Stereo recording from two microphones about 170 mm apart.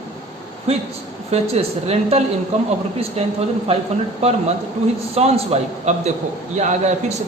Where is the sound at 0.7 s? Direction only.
35° right (ahead or behind).